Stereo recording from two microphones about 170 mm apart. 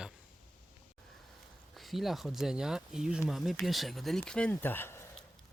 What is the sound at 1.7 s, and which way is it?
Speech, centre (ahead or behind).